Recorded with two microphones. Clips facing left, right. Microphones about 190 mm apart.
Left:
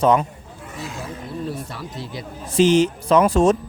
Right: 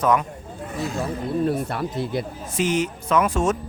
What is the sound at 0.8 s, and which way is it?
Speech, 60° right (ahead or behind).